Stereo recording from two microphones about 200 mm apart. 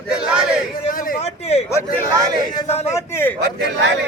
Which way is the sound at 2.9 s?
10° left (ahead or behind).